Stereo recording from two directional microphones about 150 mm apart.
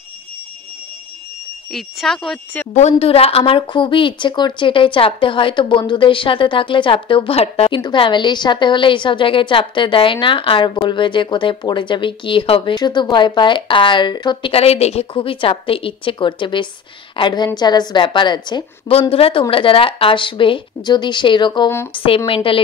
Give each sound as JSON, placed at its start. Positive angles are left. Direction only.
{"t": 1.7, "sound": "speech", "side_deg": 0}
{"t": 2.7, "sound": "a woman's voice", "side_deg": 45}